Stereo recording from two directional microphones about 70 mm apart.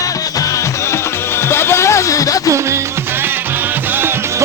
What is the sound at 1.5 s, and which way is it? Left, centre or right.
Music, left.